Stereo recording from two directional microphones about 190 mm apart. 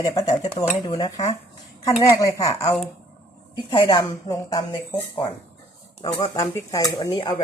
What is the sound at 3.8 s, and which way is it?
Speech, 20° left (ahead or behind).